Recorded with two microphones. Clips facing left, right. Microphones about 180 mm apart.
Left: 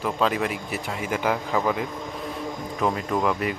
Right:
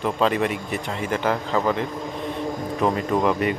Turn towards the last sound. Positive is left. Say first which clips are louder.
# right 3 dB
turn(degrees=0)  # may be behind; listen again after turning